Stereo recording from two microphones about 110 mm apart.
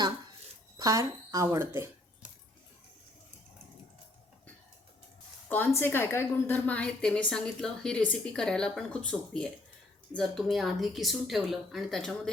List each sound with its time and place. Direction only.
0.8 s speech: 30° right (ahead or behind)
5.5 s a woman's voice: 20° left (ahead or behind)